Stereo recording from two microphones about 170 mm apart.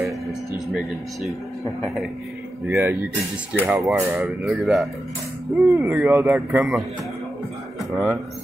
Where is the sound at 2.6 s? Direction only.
15° right (ahead or behind).